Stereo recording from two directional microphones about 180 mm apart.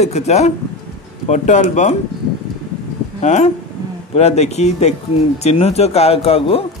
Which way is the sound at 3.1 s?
40° left (ahead or behind).